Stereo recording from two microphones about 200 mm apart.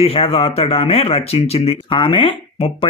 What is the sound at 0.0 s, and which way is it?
A man's voice, 30° left (ahead or behind).